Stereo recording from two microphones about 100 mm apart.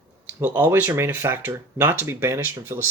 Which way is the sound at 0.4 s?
20° right (ahead or behind).